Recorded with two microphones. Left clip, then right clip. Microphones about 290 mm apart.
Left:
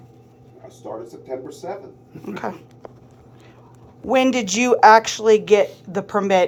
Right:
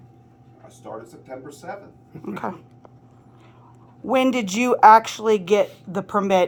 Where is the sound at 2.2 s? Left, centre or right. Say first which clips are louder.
Left 1 dB; right.